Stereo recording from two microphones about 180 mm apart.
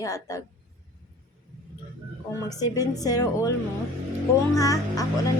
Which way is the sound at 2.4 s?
20° left (ahead or behind).